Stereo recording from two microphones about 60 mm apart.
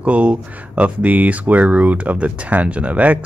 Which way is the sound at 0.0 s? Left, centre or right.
Right.